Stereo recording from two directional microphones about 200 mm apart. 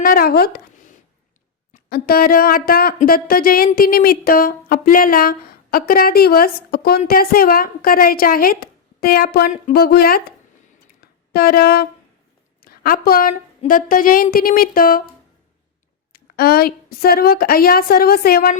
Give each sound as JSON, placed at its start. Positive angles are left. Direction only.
{"t": 0.0, "sound": "a sound", "side_deg": 45}
{"t": 1.7, "sound": "speech", "side_deg": 50}
{"t": 11.3, "sound": "speech", "side_deg": 50}
{"t": 12.5, "sound": "a sound", "side_deg": 50}
{"t": 13.7, "sound": "speech", "side_deg": 45}
{"t": 16.1, "sound": "speech", "side_deg": 50}